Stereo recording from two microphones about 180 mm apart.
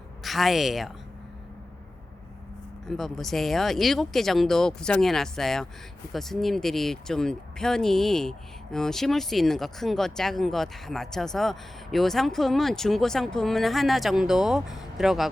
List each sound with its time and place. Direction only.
0.2 s speech: centre (ahead or behind)
2.8 s speech: centre (ahead or behind)